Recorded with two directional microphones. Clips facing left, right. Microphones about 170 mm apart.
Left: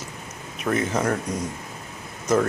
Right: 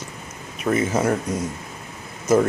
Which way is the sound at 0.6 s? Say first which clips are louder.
Right 3 dB; 5° right (ahead or behind).